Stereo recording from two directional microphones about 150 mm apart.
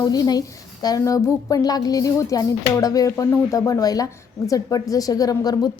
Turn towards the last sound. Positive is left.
turn(degrees=25)  # may be behind; listen again after turning